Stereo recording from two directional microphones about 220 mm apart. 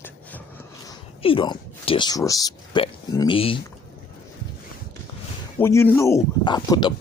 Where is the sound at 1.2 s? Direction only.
25° left (ahead or behind).